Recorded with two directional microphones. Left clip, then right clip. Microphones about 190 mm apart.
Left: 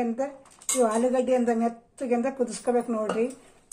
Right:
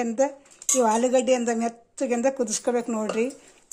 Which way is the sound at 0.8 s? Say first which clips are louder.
Right 3 dB; 45° right (ahead or behind).